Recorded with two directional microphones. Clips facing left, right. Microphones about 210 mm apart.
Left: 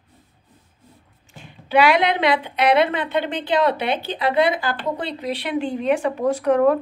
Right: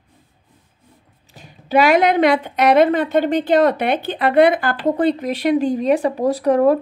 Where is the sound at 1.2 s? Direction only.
40° right (ahead or behind).